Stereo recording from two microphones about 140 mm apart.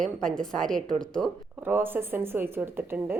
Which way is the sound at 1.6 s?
15° right (ahead or behind).